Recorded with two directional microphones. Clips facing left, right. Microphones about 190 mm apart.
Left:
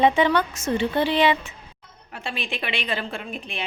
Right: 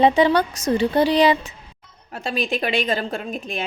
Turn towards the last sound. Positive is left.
turn(degrees=-40)  # may be behind; listen again after turning